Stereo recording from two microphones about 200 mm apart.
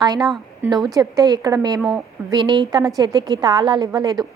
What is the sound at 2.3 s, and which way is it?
A woman's voice, 20° right (ahead or behind).